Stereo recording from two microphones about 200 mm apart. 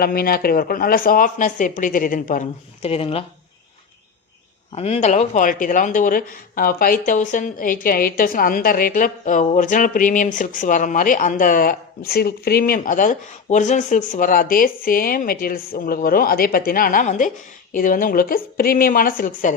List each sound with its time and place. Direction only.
0.0 s speech: 50° left (ahead or behind)
2.8 s speech: 30° left (ahead or behind)
4.7 s speech: 30° left (ahead or behind)